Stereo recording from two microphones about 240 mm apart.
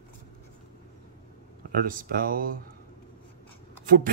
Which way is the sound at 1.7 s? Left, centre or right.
Right.